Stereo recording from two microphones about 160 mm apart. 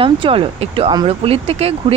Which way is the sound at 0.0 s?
35° right (ahead or behind).